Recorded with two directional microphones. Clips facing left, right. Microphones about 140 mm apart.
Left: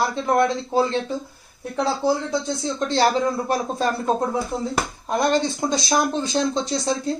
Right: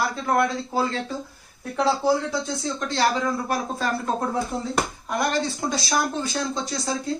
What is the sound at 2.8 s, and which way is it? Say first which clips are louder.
A man's voice: left 4 dB; 30° left (ahead or behind).